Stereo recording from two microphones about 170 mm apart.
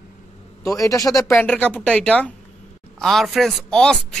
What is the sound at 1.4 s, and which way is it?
Speech, 5° left (ahead or behind).